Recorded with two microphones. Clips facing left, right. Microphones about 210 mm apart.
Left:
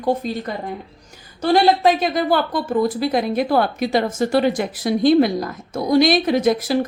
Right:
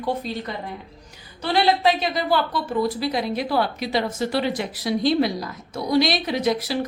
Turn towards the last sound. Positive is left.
turn(degrees=50)  # may be behind; listen again after turning